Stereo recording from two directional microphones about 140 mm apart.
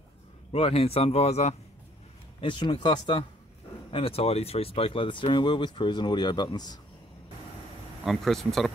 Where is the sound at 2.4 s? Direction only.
35° left (ahead or behind).